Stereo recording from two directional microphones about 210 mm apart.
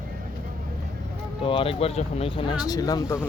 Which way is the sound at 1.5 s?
25° left (ahead or behind).